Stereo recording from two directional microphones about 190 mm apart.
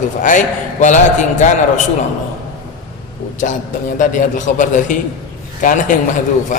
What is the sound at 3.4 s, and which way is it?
A man's voice, 45° left (ahead or behind).